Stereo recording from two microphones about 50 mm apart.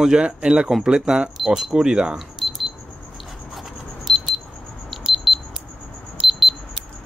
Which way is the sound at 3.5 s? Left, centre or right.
Centre.